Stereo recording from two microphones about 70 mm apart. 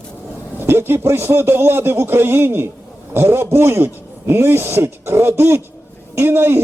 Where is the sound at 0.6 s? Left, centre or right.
Right.